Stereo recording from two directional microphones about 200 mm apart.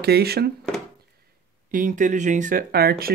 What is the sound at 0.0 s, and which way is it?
Speech, 55° right (ahead or behind).